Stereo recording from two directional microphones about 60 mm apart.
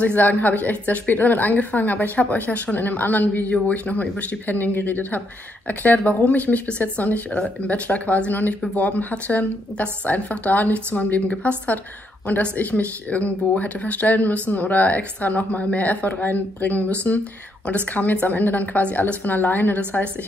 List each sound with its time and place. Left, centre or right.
0.0 s a woman's voice: left